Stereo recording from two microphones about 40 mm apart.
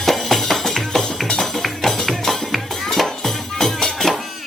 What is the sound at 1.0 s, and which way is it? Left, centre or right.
Music, centre.